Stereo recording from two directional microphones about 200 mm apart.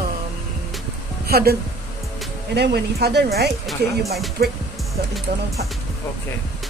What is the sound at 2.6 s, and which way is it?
Speech, 55° right (ahead or behind).